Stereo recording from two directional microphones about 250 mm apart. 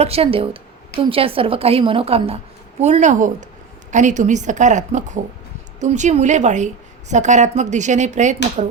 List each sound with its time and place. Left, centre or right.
0.0 s a woman's voice: right